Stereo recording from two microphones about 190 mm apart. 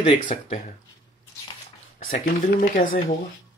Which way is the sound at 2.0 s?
45° left (ahead or behind).